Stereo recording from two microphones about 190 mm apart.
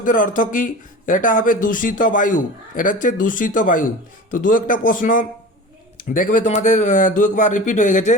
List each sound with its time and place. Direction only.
0.0 s speech: 45° left (ahead or behind)